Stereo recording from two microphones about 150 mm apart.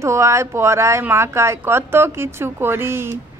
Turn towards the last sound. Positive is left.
turn(degrees=-15)  # may be behind; listen again after turning